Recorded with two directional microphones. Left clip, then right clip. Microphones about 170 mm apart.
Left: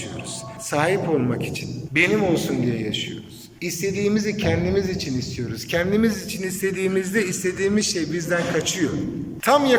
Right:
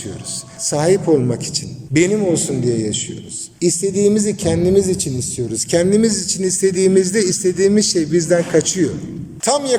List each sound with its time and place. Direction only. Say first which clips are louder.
0.7 s a man's voice: right 6 dB; 45° right (ahead or behind)